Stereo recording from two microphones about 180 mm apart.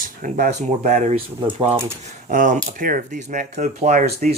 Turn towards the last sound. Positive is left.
turn(degrees=-45)  # may be behind; listen again after turning